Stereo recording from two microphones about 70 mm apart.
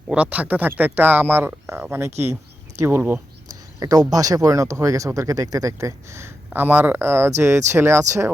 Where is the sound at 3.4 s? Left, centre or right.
Right.